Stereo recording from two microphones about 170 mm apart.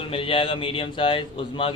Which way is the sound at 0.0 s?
30° left (ahead or behind).